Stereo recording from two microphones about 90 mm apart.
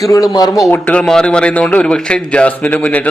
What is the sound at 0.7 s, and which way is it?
Speech, 20° left (ahead or behind).